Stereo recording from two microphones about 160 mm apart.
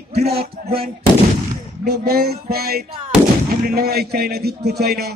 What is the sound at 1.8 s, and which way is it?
A man's voice, 85° right.